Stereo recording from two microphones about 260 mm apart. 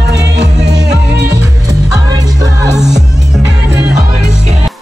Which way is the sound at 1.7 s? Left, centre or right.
Centre.